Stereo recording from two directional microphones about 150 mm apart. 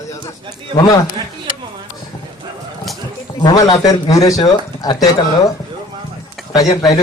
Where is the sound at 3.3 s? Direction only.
25° left (ahead or behind).